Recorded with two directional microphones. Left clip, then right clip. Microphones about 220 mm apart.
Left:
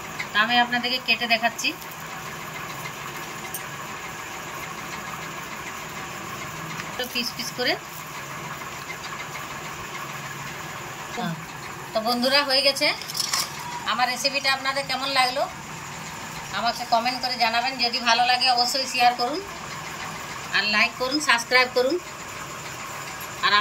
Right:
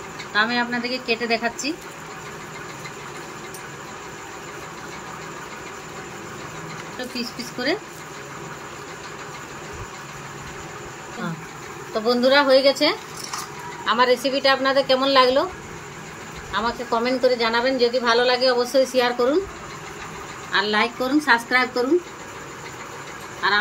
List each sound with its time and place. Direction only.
0.3 s speech: 30° right (ahead or behind)
7.0 s speech: 30° right (ahead or behind)
11.9 s a woman's voice: 30° right (ahead or behind)
16.5 s a woman's voice: 40° right (ahead or behind)
20.5 s a woman's voice: 30° right (ahead or behind)